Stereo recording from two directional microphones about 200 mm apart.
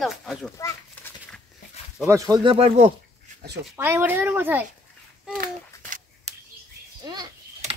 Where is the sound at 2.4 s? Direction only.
30° right (ahead or behind).